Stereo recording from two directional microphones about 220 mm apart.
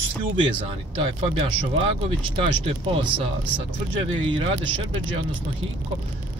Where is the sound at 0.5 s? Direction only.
25° right (ahead or behind).